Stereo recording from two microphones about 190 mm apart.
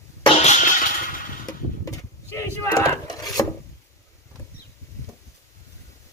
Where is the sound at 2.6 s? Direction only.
20° left (ahead or behind).